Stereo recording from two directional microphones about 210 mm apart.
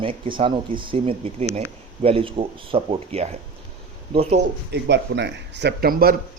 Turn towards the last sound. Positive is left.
turn(degrees=-45)  # may be behind; listen again after turning